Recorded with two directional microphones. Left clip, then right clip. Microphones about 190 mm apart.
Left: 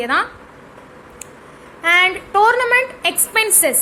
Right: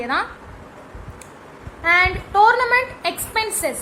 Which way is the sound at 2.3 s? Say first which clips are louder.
Right 1 dB; 10° left (ahead or behind).